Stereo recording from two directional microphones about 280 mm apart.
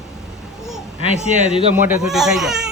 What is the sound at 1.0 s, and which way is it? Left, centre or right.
Speech, right.